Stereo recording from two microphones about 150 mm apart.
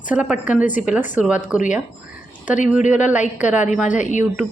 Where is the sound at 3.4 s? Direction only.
10° right (ahead or behind).